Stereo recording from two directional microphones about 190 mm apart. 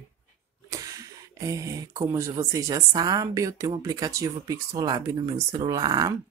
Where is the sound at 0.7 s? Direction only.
20° right (ahead or behind).